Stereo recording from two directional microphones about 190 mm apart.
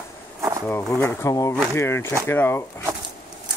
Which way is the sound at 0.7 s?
10° left (ahead or behind).